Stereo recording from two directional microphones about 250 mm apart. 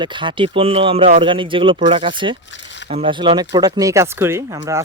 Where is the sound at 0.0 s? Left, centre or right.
Centre.